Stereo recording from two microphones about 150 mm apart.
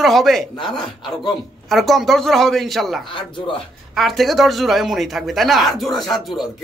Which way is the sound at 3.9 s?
Centre (ahead or behind).